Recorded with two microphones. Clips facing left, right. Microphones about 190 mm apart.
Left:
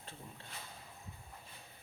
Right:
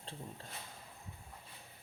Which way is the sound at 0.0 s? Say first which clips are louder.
Right 4 dB; 30° right (ahead or behind).